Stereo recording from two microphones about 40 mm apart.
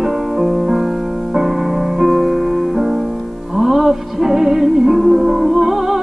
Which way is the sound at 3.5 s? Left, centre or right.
Centre.